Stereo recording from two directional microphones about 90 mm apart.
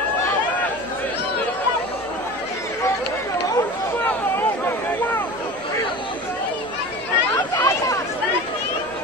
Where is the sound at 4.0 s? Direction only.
25° left (ahead or behind).